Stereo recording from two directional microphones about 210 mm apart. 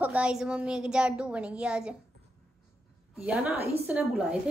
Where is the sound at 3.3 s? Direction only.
5° right (ahead or behind).